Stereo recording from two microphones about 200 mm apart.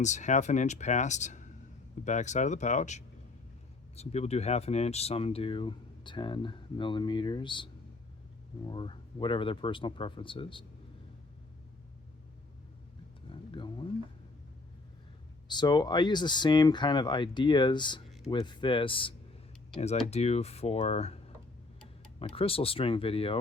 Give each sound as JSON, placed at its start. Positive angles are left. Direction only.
{"t": 0.0, "sound": "speech", "side_deg": 35}
{"t": 13.5, "sound": "a sound", "side_deg": 25}
{"t": 15.4, "sound": "speech", "side_deg": 20}
{"t": 22.2, "sound": "speech", "side_deg": 25}